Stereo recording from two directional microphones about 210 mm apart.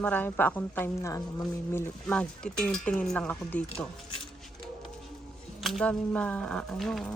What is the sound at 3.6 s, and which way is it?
Speech, 30° left (ahead or behind).